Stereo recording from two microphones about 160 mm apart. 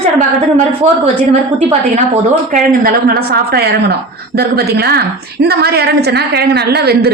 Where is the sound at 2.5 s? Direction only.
60° right (ahead or behind).